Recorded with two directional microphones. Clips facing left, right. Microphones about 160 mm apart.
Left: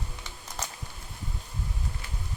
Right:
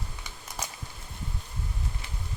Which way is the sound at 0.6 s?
10° right (ahead or behind).